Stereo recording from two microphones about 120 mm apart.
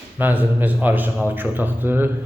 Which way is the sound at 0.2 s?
15° right (ahead or behind).